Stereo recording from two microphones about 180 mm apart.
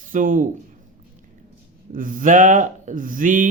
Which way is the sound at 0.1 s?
45° right (ahead or behind).